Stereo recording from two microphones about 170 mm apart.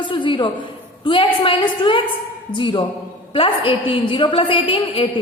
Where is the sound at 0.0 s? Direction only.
30° left (ahead or behind).